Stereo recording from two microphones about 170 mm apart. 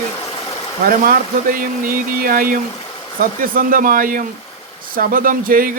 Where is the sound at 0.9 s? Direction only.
55° right (ahead or behind).